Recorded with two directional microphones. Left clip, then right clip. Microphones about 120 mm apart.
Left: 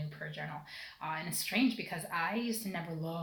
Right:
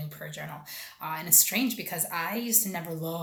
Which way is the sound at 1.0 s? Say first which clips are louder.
Right 10 dB; 25° right (ahead or behind).